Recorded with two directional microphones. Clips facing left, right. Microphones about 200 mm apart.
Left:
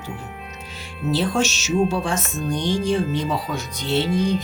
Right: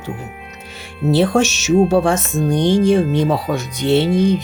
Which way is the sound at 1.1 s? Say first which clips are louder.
Right 7 dB; 60° right (ahead or behind).